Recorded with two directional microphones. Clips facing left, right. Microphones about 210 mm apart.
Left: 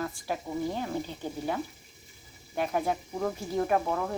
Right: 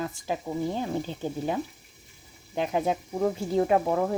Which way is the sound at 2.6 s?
20° right (ahead or behind).